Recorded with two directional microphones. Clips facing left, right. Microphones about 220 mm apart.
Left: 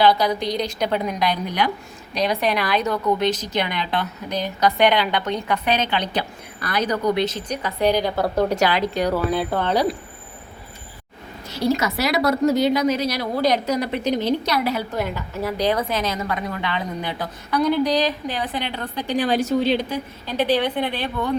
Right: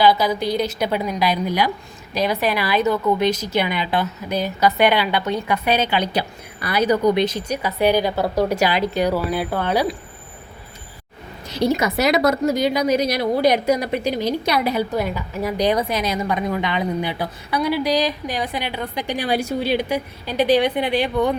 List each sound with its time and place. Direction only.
0.0 s a woman's voice: 5° right (ahead or behind)
11.5 s speech: 20° right (ahead or behind)